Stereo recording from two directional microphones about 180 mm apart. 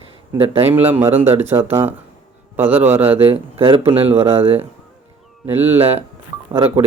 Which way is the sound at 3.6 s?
30° right (ahead or behind).